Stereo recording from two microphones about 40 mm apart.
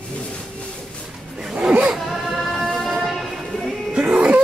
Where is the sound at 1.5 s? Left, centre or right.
Right.